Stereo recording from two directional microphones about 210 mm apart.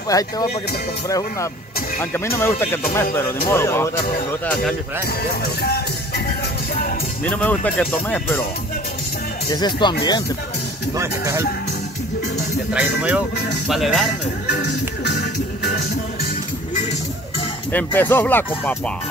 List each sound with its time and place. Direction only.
0.1 s speech: 15° left (ahead or behind)
5.0 s speech: 50° left (ahead or behind)
7.2 s speech: 5° left (ahead or behind)
9.5 s speech: 20° left (ahead or behind)
11.0 s speech: 15° right (ahead or behind)
12.7 s speech: 5° right (ahead or behind)
14.5 s music: 55° left (ahead or behind)
17.7 s speech: 10° left (ahead or behind)